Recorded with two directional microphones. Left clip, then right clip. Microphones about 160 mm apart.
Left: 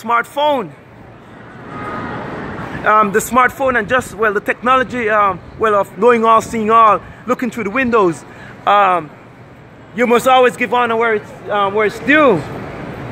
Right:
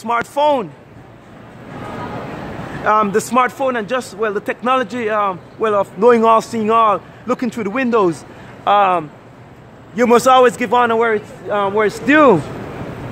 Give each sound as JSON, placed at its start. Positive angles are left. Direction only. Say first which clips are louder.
{"t": 0.0, "sound": "a man's voice", "louder": "left 1 dB", "side_deg": -15}
{"t": 2.8, "sound": "speech", "louder": "left 2 dB", "side_deg": -10}
{"t": 6.0, "sound": "a man's voice", "louder": "even", "side_deg": -25}
{"t": 6.5, "sound": "a man's voice", "louder": "left 3 dB", "side_deg": -10}